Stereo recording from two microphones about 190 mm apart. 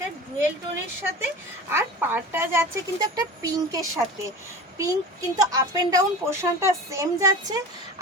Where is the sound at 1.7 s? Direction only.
10° right (ahead or behind).